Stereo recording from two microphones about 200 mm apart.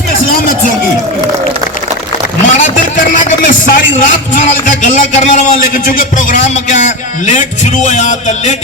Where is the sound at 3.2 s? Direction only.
45° left (ahead or behind).